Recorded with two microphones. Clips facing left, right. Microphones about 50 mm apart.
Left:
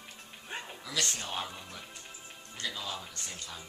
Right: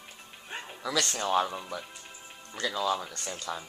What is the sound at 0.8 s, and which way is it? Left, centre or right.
Speech, right.